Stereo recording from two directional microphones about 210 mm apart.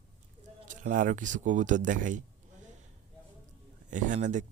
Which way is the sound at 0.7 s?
40° right (ahead or behind).